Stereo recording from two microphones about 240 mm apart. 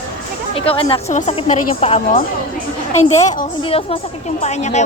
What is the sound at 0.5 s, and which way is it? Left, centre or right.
A woman's voice, left.